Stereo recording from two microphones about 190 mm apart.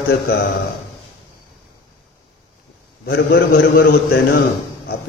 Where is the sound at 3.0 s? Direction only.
60° left (ahead or behind).